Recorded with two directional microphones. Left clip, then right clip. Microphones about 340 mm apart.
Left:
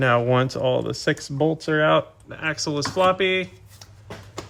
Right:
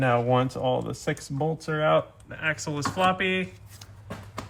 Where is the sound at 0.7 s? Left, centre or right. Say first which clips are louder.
Left 5 dB; left.